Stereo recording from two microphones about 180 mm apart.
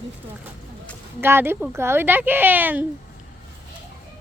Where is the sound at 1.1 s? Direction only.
10° right (ahead or behind).